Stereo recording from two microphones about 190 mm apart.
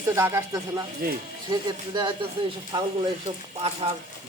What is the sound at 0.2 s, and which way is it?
Speech, 15° right (ahead or behind).